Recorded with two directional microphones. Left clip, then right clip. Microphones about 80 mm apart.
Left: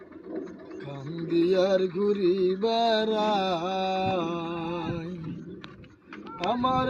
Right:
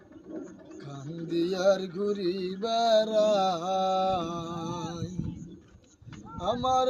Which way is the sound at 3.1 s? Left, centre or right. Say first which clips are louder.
Right 1 dB; right.